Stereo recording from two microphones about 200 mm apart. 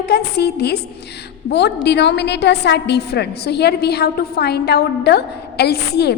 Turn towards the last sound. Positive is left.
turn(degrees=55)  # may be behind; listen again after turning